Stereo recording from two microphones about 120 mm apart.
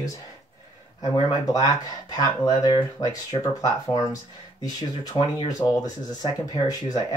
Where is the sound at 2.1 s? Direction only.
35° left (ahead or behind).